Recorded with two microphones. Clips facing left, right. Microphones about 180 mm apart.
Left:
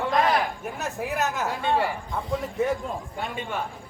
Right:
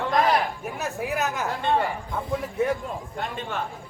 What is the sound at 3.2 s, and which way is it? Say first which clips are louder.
Speech: right 1 dB; 5° left (ahead or behind).